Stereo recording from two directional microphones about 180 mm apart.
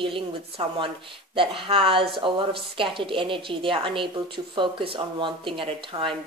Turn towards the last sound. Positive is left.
turn(degrees=-30)  # may be behind; listen again after turning